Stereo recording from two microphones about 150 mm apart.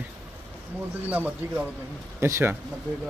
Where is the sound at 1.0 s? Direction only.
10° right (ahead or behind).